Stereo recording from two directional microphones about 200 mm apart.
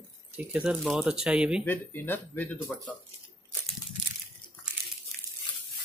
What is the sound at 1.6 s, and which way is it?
Speech, 10° left (ahead or behind).